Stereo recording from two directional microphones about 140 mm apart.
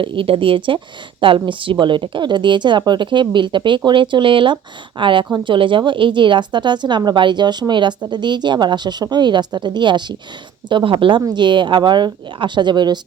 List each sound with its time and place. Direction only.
0.0 s speech: 40° right (ahead or behind)